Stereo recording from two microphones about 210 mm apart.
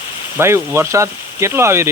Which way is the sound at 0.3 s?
10° right (ahead or behind).